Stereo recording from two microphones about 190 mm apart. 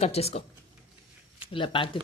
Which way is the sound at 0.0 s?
35° left (ahead or behind).